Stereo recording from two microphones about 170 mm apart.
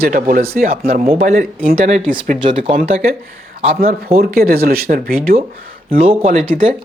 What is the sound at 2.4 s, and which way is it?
Speech, 35° right (ahead or behind).